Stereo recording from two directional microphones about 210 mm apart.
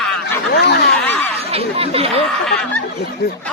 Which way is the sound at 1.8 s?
30° right (ahead or behind).